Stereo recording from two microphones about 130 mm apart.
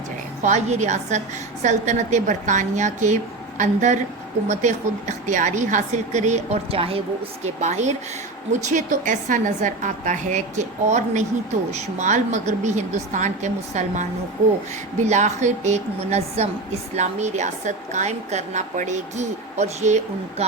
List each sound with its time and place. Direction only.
0.4 s a woman's voice: 60° right (ahead or behind); by 7.0 s 45° right (ahead or behind)
7.4 s a woman's voice: 65° right (ahead or behind)
8.7 s a woman's voice: 80° right; by 20.0 s 60° right (ahead or behind)